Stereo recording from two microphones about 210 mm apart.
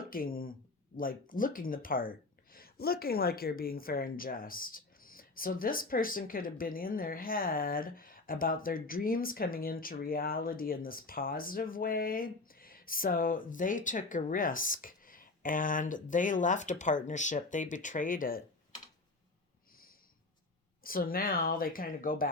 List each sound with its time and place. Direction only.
0.0 s speech: 40° left (ahead or behind)
20.8 s speech: 45° left (ahead or behind)